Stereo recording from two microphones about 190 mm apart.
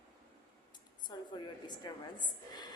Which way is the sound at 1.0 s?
20° left (ahead or behind).